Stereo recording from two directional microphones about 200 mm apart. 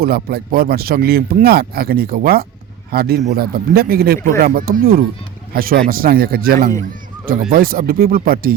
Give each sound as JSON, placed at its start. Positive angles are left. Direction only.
{"t": 0.0, "sound": "speech", "side_deg": -50}